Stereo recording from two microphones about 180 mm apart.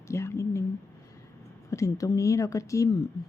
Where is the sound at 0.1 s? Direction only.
15° left (ahead or behind).